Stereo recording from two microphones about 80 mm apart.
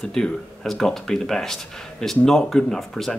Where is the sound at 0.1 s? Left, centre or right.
Centre.